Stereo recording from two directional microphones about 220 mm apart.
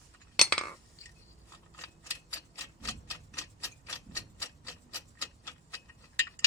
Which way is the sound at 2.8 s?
15° left (ahead or behind).